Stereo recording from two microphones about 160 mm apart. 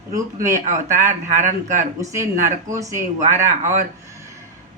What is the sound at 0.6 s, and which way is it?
Speech, 50° right (ahead or behind).